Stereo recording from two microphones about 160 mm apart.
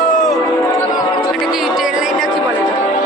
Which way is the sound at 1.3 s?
Centre (ahead or behind).